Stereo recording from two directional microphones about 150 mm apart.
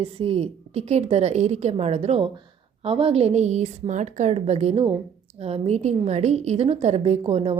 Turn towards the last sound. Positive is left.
turn(degrees=-40)  # may be behind; listen again after turning